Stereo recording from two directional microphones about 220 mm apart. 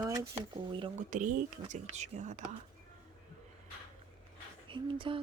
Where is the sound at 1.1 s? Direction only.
35° right (ahead or behind).